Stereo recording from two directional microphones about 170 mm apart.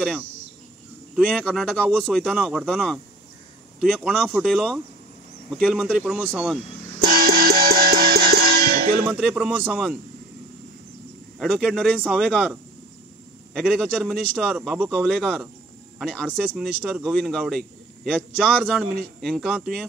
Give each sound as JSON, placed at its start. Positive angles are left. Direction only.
{"t": 1.1, "sound": "speech", "side_deg": 0}
{"t": 7.1, "sound": "music", "side_deg": -60}
{"t": 9.0, "sound": "a man's voice", "side_deg": -5}
{"t": 11.3, "sound": "speech", "side_deg": 0}